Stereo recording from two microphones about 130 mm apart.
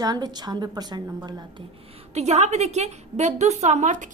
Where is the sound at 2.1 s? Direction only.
55° right (ahead or behind).